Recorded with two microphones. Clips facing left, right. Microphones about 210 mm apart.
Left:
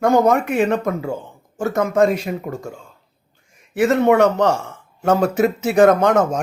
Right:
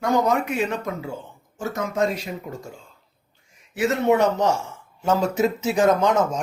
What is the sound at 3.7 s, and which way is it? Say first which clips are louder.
A man's voice: left 5 dB; 55° left (ahead or behind).